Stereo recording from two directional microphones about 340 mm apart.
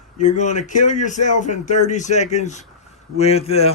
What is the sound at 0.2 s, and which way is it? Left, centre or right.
Speech, left.